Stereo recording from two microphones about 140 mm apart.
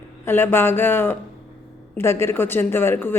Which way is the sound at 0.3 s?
15° left (ahead or behind).